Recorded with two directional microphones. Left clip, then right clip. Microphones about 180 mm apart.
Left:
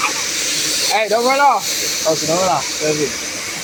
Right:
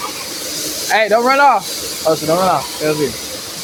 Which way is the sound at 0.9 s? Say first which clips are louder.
Right 4 dB; 25° right (ahead or behind).